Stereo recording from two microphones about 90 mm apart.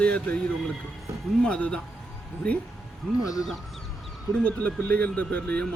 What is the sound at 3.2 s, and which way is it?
Speech, 40° left (ahead or behind).